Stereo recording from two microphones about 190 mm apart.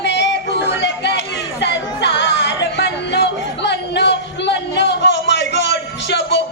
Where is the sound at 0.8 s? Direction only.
65° left (ahead or behind).